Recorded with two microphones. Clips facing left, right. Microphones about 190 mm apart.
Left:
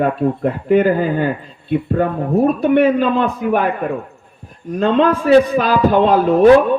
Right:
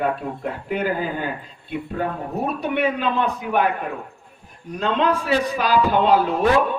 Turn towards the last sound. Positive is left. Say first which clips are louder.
# left 8 dB
turn(degrees=50)  # may be behind; listen again after turning